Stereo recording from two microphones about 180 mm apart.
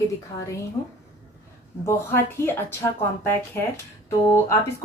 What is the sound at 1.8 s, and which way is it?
A woman's voice, 15° left (ahead or behind).